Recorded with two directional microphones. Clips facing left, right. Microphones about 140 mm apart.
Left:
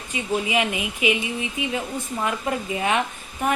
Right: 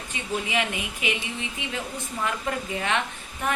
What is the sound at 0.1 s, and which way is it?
A woman's voice, 15° left (ahead or behind).